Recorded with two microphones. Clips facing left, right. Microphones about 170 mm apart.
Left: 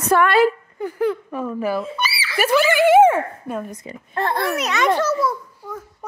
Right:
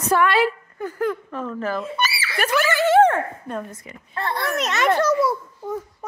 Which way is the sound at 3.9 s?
45° left (ahead or behind).